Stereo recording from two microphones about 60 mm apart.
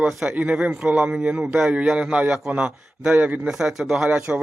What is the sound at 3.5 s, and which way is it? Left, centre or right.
Speech, centre.